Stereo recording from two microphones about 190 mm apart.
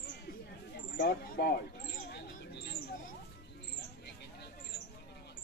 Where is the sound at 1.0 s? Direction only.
55° left (ahead or behind).